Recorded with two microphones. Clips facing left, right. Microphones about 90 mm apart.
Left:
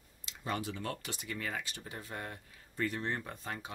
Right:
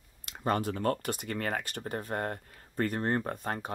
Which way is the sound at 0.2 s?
50° right (ahead or behind).